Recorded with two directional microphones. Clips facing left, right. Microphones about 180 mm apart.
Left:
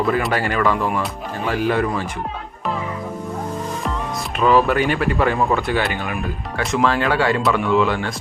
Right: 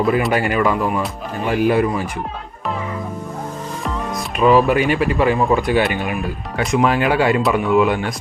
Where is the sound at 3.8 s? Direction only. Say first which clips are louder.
Right 1 dB; centre (ahead or behind).